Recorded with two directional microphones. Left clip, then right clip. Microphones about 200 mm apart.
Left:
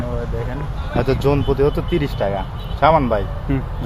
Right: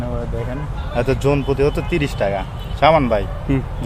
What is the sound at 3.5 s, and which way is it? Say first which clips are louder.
Speech: right 3 dB; 60° right (ahead or behind).